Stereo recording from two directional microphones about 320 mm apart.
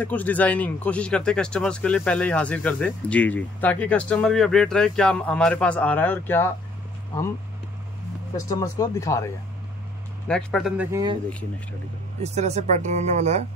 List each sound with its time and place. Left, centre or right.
0.0 s speech: centre
8.5 s speech: centre
10.2 s speech: centre
12.2 s speech: right